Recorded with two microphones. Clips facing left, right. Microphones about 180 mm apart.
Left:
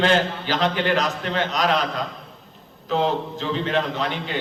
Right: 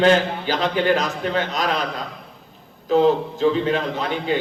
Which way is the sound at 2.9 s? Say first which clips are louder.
Right 6 dB; 45° right (ahead or behind).